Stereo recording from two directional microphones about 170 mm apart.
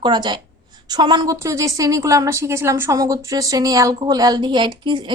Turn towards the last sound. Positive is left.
turn(degrees=-25)  # may be behind; listen again after turning